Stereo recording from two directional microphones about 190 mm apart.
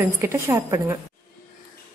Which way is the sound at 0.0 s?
10° right (ahead or behind).